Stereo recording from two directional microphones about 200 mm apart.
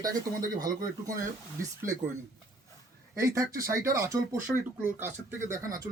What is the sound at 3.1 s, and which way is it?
Speech, 15° right (ahead or behind).